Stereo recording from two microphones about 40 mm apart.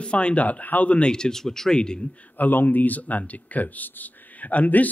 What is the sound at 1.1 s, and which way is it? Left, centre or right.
Speech, centre.